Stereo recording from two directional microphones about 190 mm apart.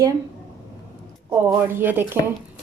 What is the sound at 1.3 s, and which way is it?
Speech, 10° right (ahead or behind).